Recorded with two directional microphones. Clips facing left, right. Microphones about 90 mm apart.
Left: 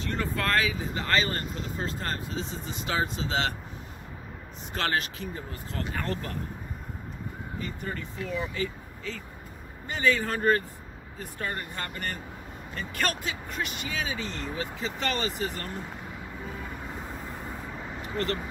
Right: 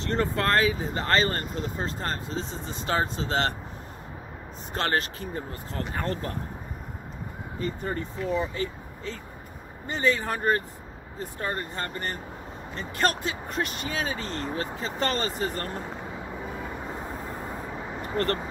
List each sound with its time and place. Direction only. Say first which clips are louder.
0.1 s speech: right 4 dB; 35° right (ahead or behind)
4.7 s speech: right 2 dB; 35° right (ahead or behind)
7.6 s speech: right 7 dB; 35° right (ahead or behind)
16.4 s vehicle: right 1 dB; 15° right (ahead or behind)
18.0 s speech: right 3 dB; 45° right (ahead or behind)